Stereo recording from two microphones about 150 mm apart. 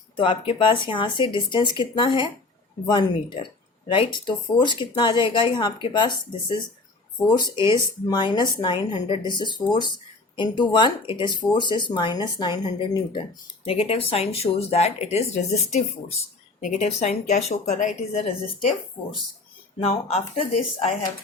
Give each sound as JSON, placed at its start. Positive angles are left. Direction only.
{"t": 0.2, "sound": "speech", "side_deg": 35}
{"t": 13.7, "sound": "speech", "side_deg": 40}
{"t": 19.0, "sound": "speech", "side_deg": 30}
{"t": 19.8, "sound": "speech", "side_deg": 45}